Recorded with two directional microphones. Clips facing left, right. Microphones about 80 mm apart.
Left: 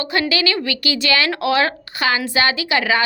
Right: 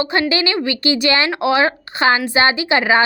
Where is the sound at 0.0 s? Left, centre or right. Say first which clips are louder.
Right 2 dB; right.